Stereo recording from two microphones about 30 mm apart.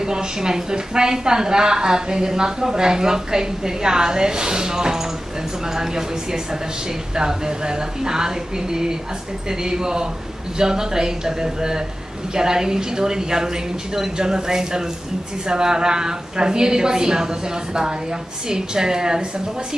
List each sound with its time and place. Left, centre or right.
0.0 s a woman's voice: right
18.5 s a woman's voice: right